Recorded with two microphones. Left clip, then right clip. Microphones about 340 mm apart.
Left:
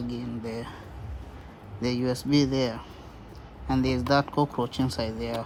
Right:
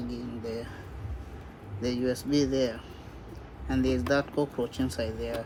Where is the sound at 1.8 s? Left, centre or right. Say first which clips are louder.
Left 1 dB; left.